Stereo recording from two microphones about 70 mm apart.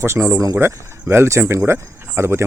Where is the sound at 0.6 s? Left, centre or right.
Right.